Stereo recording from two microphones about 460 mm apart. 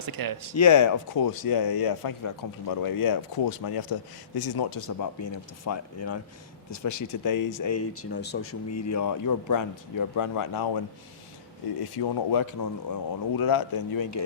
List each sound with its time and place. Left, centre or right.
0.0 s speech: right
0.5 s speech: left
11.8 s speech: left